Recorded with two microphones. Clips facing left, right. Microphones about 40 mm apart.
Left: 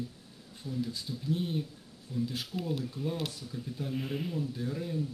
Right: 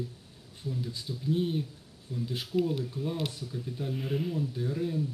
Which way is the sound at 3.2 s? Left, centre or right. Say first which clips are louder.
Right 2 dB; right.